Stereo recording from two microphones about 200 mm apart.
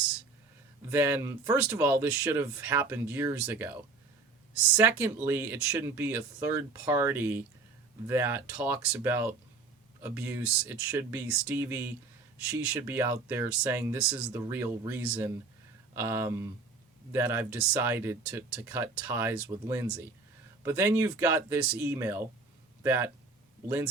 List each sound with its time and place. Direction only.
0.9 s speech: 10° right (ahead or behind)
4.8 s speech: 10° right (ahead or behind)